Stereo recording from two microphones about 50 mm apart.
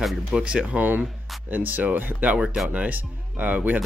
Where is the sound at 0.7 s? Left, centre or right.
Right.